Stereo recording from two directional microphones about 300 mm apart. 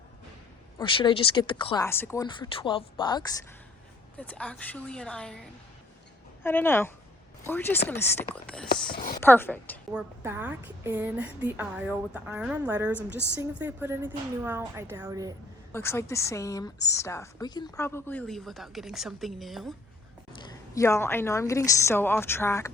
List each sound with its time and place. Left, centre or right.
0.8 s a woman's voice: centre
9.0 s a woman's voice: left
9.2 s a woman's voice: centre
9.9 s a woman's voice: centre
15.7 s a woman's voice: centre
20.4 s a woman's voice: centre